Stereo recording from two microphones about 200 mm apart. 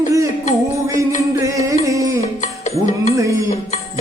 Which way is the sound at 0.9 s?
15° right (ahead or behind).